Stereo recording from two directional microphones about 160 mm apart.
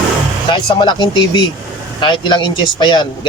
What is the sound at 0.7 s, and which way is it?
Speech, 30° left (ahead or behind).